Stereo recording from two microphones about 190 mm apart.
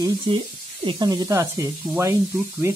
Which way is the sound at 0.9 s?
20° right (ahead or behind).